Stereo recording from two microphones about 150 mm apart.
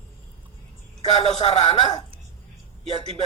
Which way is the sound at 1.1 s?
45° left (ahead or behind).